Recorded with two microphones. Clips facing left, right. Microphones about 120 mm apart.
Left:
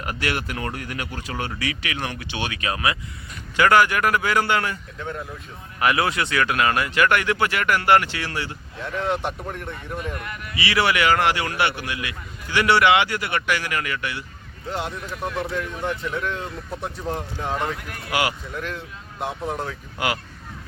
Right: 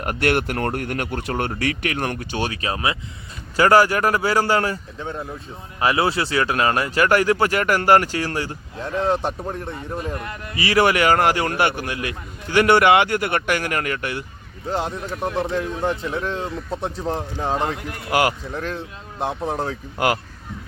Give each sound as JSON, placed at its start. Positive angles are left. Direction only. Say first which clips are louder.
{"t": 0.0, "sound": "speech", "louder": "right 6 dB", "side_deg": -55}
{"t": 4.9, "sound": "speech", "louder": "right 2 dB", "side_deg": -25}
{"t": 10.5, "sound": "speech", "louder": "right 4 dB", "side_deg": -40}
{"t": 14.7, "sound": "speech", "louder": "right 4 dB", "side_deg": -35}
{"t": 18.1, "sound": "speech", "louder": "right 4 dB", "side_deg": -45}